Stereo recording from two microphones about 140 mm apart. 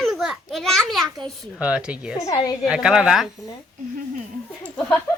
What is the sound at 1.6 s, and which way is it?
Speech, 10° right (ahead or behind).